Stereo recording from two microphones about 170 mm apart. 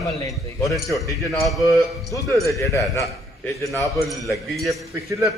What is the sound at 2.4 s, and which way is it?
Speech, 15° left (ahead or behind).